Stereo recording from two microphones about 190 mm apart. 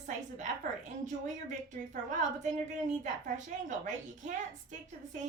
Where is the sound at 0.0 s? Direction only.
40° right (ahead or behind).